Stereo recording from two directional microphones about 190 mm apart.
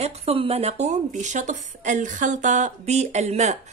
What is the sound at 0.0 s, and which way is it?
A woman's voice, 30° right (ahead or behind).